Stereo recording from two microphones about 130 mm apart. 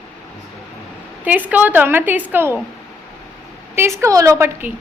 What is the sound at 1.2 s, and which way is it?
A woman's voice, 15° right (ahead or behind).